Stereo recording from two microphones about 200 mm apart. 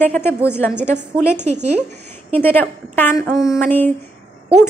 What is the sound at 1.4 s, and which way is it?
Speech, 35° right (ahead or behind).